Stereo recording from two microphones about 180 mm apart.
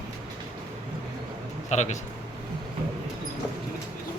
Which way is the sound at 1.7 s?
40° left (ahead or behind).